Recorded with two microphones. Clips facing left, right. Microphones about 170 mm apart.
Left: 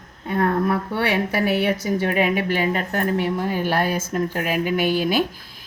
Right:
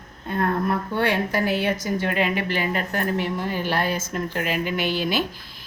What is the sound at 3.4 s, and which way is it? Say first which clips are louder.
Speech: left 3 dB; 50° left (ahead or behind).